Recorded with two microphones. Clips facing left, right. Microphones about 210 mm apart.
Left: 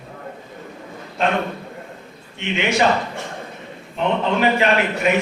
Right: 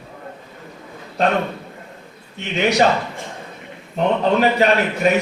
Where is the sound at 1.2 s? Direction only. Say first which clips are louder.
Right 2 dB; 35° right (ahead or behind).